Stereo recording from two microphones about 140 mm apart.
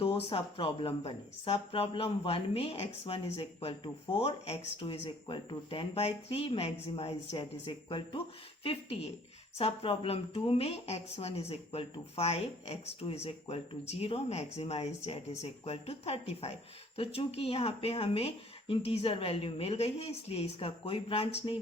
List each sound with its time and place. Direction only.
0.0 s a woman's voice: 40° left (ahead or behind)